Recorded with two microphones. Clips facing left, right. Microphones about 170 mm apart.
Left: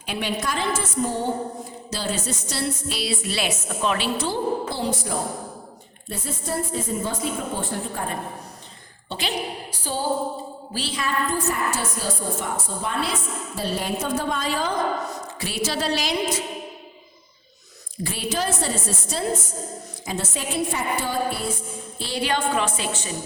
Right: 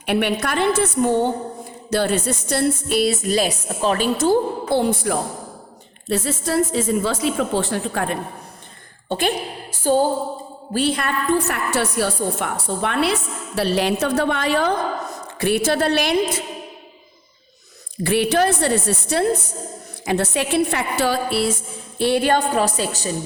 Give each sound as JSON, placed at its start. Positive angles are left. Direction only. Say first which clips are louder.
{"t": 0.0, "sound": "a woman's voice", "louder": "right 7 dB", "side_deg": -65}
{"t": 6.1, "sound": "a woman's voice", "louder": "right 8 dB", "side_deg": -85}
{"t": 9.0, "sound": "a woman's voice", "louder": "right 6 dB", "side_deg": -50}
{"t": 18.0, "sound": "a woman's voice", "louder": "right 9 dB", "side_deg": -65}
{"t": 21.9, "sound": "a woman's voice", "louder": "right 8 dB", "side_deg": -60}